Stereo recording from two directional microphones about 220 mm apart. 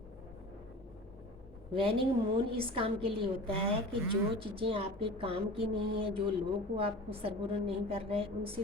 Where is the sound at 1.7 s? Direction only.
25° right (ahead or behind).